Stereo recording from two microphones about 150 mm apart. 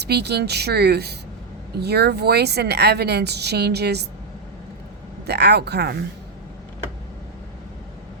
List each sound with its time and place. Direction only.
0.0 s a woman's voice: 90° right
5.2 s a woman's voice: 90° right